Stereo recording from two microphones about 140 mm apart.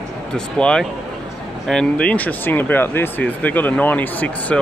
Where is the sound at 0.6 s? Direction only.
5° left (ahead or behind).